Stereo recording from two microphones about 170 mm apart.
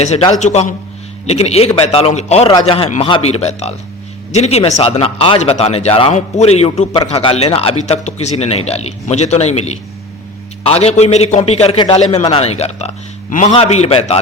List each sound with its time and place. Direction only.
0.0 s a man's voice: 40° left (ahead or behind)